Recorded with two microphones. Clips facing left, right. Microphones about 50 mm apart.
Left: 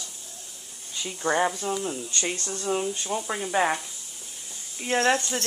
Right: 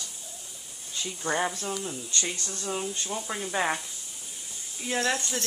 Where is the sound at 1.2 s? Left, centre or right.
Centre.